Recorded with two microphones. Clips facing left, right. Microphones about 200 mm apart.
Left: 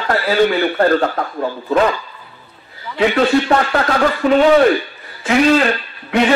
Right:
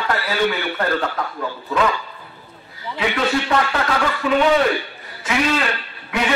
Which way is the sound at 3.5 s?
45° left (ahead or behind).